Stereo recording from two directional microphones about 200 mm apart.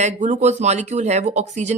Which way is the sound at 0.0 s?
35° right (ahead or behind).